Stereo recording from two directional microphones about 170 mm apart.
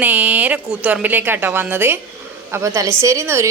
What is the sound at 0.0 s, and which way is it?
A woman's voice, 10° right (ahead or behind).